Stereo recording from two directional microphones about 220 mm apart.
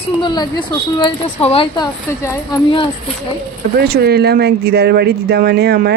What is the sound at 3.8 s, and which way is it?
A woman's voice, 45° right (ahead or behind).